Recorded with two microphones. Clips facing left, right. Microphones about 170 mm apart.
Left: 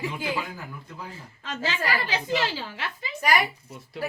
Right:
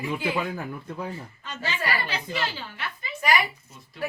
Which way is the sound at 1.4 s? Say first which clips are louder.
Left 4 dB; 90° left.